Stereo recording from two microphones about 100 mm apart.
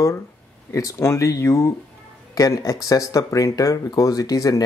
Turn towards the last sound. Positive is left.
turn(degrees=35)  # may be behind; listen again after turning